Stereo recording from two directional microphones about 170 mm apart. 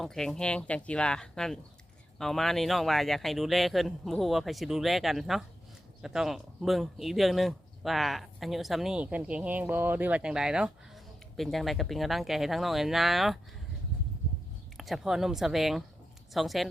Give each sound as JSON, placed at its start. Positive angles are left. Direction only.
{"t": 0.0, "sound": "speech", "side_deg": 5}
{"t": 14.8, "sound": "speech", "side_deg": 0}